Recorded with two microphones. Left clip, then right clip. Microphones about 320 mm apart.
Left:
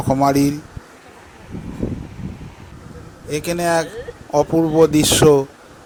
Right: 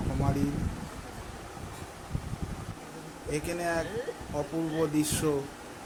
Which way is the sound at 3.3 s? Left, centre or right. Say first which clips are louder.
Left 13 dB; left.